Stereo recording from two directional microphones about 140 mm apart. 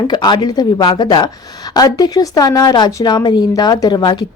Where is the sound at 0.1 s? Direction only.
30° left (ahead or behind).